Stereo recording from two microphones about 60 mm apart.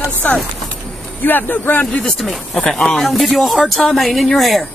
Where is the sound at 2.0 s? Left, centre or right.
Centre.